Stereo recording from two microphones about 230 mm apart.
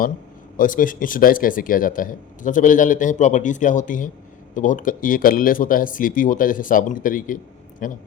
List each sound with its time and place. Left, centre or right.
0.5 s a man's voice: left